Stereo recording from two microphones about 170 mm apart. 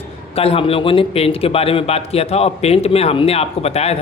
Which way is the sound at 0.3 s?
35° left (ahead or behind).